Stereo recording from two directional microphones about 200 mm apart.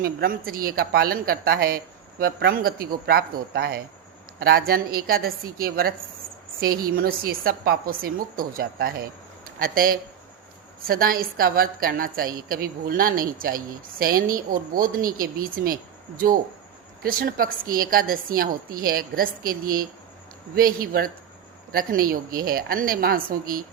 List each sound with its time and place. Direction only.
0.0 s speech: 45° right (ahead or behind)